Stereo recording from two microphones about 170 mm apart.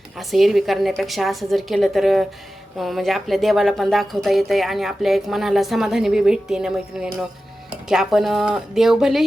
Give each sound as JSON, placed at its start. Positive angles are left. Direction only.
{"t": 0.2, "sound": "a woman's voice", "side_deg": 0}